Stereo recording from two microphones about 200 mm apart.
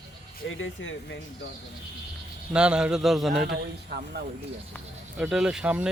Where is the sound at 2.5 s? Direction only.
5° right (ahead or behind).